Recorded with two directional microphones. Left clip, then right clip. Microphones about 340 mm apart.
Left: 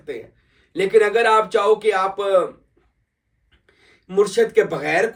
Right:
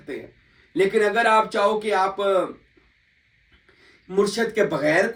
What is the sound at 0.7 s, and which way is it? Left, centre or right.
Speech, centre.